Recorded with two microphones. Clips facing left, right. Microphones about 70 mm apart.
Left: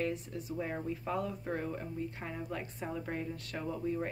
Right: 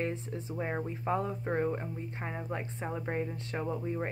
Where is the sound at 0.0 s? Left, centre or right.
Right.